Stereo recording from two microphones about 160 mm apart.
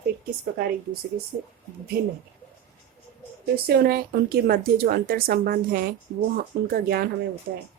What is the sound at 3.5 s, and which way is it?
Speech, 75° right (ahead or behind).